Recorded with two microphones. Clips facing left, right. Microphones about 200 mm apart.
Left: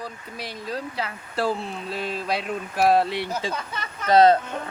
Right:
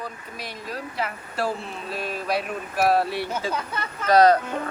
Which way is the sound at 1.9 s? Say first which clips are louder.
Right 1 dB; 25° left (ahead or behind).